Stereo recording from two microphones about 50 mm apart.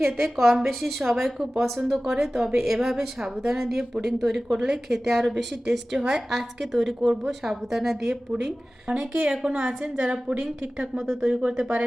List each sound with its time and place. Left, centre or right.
0.0 s speech: centre
1.0 s a woman's voice: centre
8.9 s a woman's voice: right